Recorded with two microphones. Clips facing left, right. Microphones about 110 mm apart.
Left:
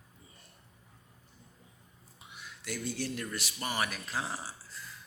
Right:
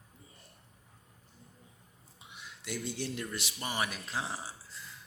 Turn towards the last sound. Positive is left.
turn(degrees=-20)  # may be behind; listen again after turning